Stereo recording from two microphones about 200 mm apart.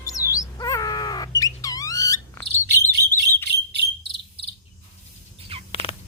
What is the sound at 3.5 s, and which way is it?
Cricket, 55° right (ahead or behind).